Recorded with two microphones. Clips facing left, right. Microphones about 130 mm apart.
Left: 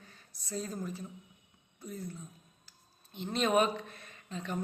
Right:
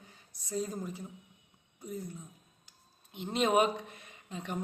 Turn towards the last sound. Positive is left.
turn(degrees=-15)  # may be behind; listen again after turning